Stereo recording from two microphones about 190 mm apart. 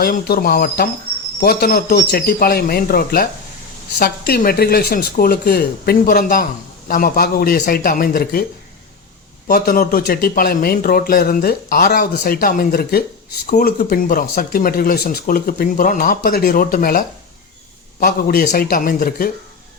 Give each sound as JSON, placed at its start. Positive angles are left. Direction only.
{"t": 0.0, "sound": "speech", "side_deg": 50}
{"t": 9.5, "sound": "speech", "side_deg": 50}